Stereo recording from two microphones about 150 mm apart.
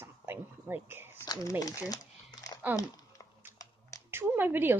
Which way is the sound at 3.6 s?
20° left (ahead or behind).